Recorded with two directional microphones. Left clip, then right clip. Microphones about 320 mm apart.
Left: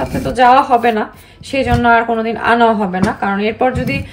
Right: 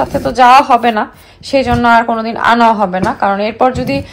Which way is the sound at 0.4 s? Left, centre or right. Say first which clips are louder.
Right 3 dB; centre.